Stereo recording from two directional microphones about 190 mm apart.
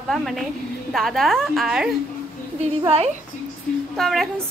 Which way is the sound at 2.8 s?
35° right (ahead or behind).